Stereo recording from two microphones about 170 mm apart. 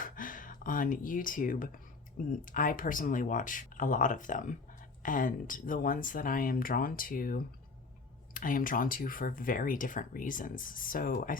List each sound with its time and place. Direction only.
0.0 s speech: 55° left (ahead or behind)